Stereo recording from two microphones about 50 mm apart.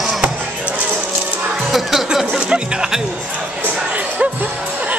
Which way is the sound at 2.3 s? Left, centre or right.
Centre.